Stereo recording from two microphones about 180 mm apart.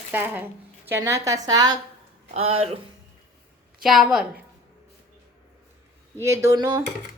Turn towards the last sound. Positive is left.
turn(degrees=-20)  # may be behind; listen again after turning